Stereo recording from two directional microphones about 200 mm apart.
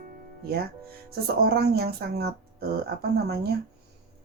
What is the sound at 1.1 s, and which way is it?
Speech, 50° right (ahead or behind).